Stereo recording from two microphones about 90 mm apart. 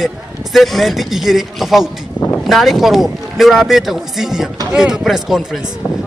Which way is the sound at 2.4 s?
Centre (ahead or behind).